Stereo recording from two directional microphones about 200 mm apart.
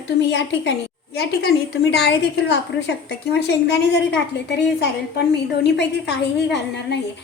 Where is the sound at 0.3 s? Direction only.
65° left (ahead or behind).